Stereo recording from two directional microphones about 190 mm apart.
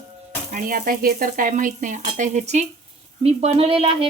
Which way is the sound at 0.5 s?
50° right (ahead or behind).